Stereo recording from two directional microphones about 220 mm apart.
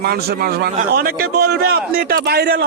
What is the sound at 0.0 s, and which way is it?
A man's voice, 45° right (ahead or behind).